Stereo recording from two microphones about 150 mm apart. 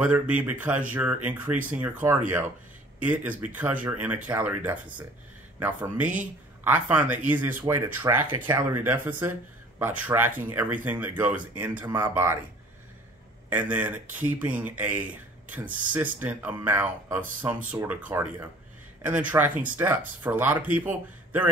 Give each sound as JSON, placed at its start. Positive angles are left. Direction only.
{"t": 0.0, "sound": "speech", "side_deg": -10}
{"t": 13.5, "sound": "speech", "side_deg": -10}